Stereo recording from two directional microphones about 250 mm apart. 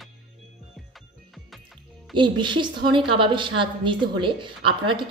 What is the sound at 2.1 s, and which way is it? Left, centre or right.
A woman's voice, centre.